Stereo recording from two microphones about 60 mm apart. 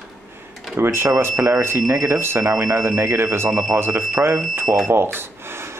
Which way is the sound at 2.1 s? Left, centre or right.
Right.